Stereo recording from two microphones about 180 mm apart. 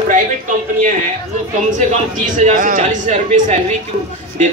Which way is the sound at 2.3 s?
45° right (ahead or behind).